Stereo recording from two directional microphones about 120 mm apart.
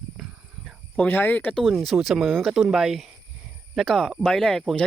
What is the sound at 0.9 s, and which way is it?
Speech, 15° left (ahead or behind).